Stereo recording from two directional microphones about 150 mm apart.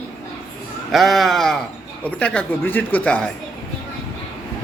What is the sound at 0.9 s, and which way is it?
A man's voice, centre (ahead or behind).